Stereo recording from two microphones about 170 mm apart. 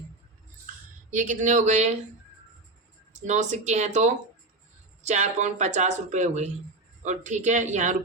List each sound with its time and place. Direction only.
1.1 s speech: 50° right (ahead or behind)
3.1 s speech: 45° right (ahead or behind)